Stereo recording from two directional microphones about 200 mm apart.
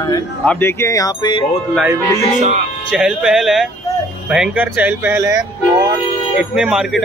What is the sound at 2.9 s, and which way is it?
Speech, 5° right (ahead or behind).